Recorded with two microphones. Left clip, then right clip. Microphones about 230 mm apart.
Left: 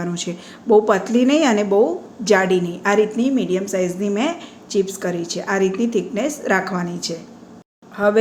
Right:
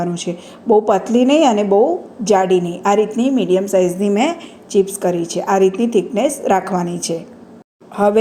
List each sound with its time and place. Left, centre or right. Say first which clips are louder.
0.0 s a woman's voice: right 5 dB; centre